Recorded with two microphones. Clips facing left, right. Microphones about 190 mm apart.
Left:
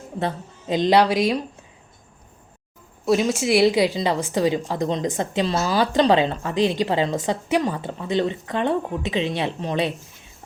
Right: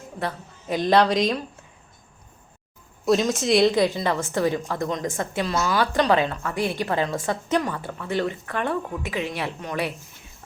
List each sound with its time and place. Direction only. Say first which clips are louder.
0.2 s a woman's voice: left 4 dB; 20° left (ahead or behind)
0.9 s a woman's voice: even; 5° left (ahead or behind)
3.1 s a woman's voice: left 1 dB; 5° left (ahead or behind); by 9.9 s 25° left (ahead or behind)